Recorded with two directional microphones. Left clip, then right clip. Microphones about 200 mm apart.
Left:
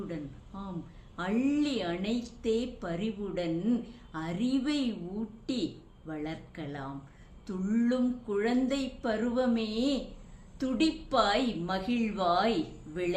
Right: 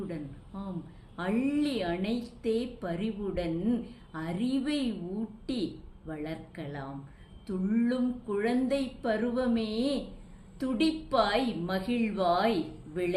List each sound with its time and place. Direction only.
0.5 s a woman's voice: 5° left (ahead or behind)